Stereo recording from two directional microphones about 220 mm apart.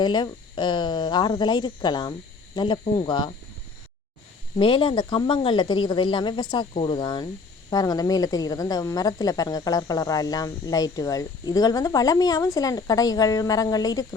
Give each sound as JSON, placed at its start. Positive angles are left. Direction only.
{"t": 0.0, "sound": "speech", "side_deg": 20}
{"t": 4.5, "sound": "a woman's voice", "side_deg": 20}